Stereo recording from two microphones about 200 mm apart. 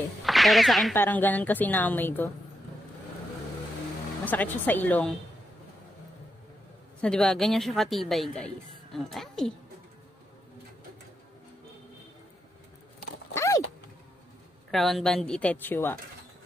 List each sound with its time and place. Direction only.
0.2 s a woman's voice: centre (ahead or behind)
4.2 s a woman's voice: 10° left (ahead or behind)
7.0 s a woman's voice: 5° left (ahead or behind)
13.3 s a sound: 15° left (ahead or behind)
14.7 s a woman's voice: centre (ahead or behind)